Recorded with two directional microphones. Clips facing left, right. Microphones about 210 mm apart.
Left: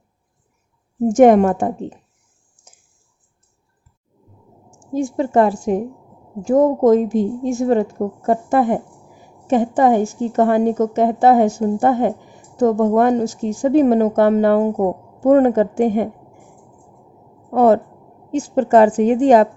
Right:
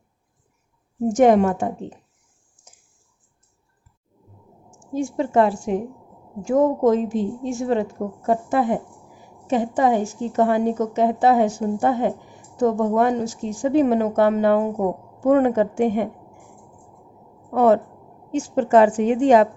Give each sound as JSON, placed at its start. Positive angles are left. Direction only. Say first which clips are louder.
{"t": 1.1, "sound": "a woman's voice", "louder": "left 5 dB", "side_deg": 50}
{"t": 4.9, "sound": "a woman's voice", "louder": "left 3 dB", "side_deg": 40}
{"t": 17.5, "sound": "a woman's voice", "louder": "left 3 dB", "side_deg": 40}